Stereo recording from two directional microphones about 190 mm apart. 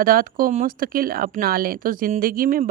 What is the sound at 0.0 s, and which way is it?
A woman's voice, 50° right (ahead or behind).